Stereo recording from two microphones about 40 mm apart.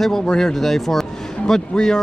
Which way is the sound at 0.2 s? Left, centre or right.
Left.